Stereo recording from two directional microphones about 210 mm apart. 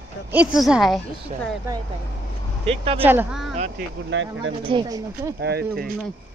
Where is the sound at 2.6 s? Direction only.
25° right (ahead or behind).